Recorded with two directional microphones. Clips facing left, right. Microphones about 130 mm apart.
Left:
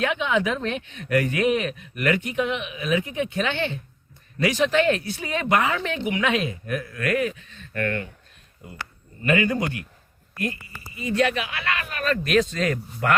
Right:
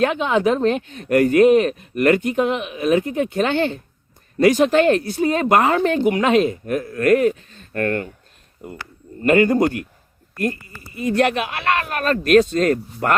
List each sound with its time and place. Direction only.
0.0 s speech: 40° right (ahead or behind)
8.6 s speech: 55° right (ahead or behind)
9.2 s speech: 40° right (ahead or behind)